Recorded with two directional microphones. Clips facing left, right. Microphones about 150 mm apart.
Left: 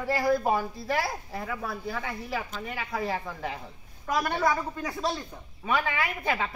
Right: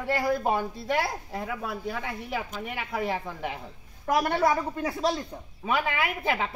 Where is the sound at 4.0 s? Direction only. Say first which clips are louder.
Right 3 dB; 25° right (ahead or behind).